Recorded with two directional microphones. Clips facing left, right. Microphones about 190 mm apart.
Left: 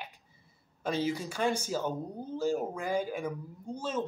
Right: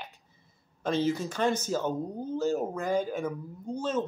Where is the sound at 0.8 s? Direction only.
10° left (ahead or behind).